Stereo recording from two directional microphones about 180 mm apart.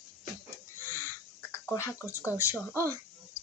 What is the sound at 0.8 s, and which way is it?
Bird, 10° left (ahead or behind).